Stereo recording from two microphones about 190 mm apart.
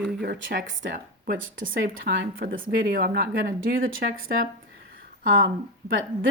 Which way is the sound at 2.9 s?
50° right (ahead or behind).